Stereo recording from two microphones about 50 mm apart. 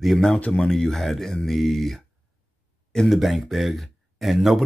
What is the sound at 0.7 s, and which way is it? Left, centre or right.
Speech, centre.